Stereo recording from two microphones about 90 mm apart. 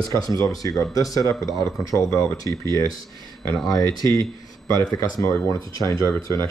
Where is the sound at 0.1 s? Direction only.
40° left (ahead or behind).